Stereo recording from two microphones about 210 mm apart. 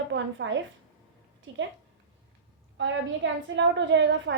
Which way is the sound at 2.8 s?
65° right (ahead or behind).